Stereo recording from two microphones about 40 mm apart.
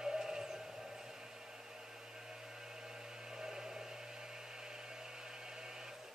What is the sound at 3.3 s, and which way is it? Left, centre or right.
Hair dryer, centre.